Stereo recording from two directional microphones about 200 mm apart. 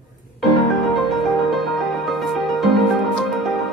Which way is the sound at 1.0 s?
Centre (ahead or behind).